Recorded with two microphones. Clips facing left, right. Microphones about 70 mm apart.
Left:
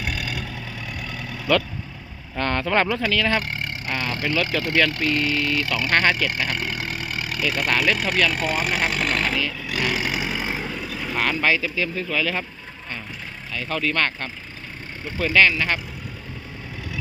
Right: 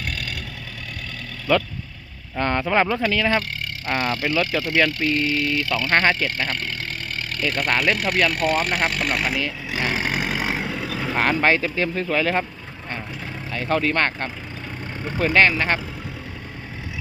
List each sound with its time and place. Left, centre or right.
0.0 s vehicle: centre
2.4 s speech: centre
2.9 s speech: right
6.3 s speech: centre
9.4 s vehicle: right
11.1 s speech: right
13.5 s speech: right